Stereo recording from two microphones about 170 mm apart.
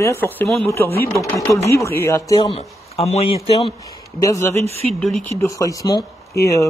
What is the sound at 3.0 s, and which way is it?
Speech, 35° left (ahead or behind).